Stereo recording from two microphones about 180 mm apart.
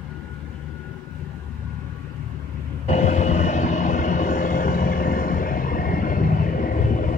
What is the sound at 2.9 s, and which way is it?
Train, 40° left (ahead or behind).